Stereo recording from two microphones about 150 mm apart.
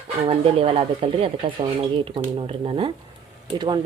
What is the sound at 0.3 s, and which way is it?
Speech, 40° right (ahead or behind).